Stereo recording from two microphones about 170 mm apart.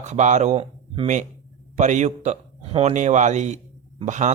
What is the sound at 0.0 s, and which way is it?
Speech, 45° right (ahead or behind).